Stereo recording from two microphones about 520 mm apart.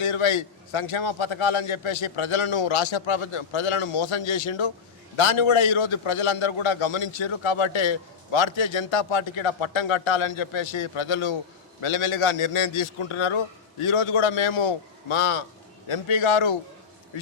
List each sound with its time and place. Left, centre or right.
0.0 s a man's voice: left
5.1 s a man's voice: left
11.8 s a man's voice: left